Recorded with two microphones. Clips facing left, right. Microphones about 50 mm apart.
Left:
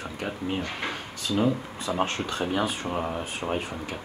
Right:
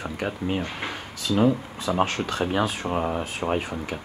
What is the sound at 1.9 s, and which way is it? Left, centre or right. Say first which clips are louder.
Speech: right 3 dB; centre.